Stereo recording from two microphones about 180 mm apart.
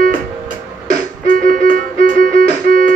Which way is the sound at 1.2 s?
50° right (ahead or behind).